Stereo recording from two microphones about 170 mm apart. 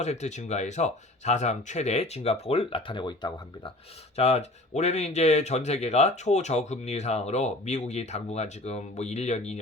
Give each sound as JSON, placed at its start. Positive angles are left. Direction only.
{"t": 0.0, "sound": "speech", "side_deg": 40}
{"t": 4.2, "sound": "speech", "side_deg": 40}